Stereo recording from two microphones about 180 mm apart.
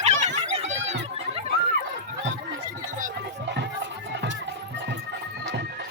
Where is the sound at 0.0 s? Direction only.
40° right (ahead or behind).